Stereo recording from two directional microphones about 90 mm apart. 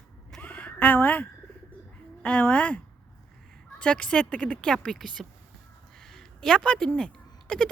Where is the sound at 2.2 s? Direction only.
15° left (ahead or behind).